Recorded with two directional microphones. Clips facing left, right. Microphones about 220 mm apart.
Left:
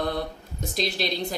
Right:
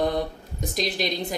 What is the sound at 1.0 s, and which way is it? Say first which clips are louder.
Speech: right 1 dB; 20° right (ahead or behind).